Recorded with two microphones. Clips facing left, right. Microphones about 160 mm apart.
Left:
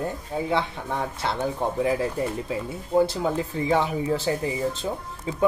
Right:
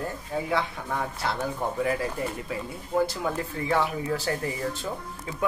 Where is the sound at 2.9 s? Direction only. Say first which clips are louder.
Left 4 dB; 25° left (ahead or behind).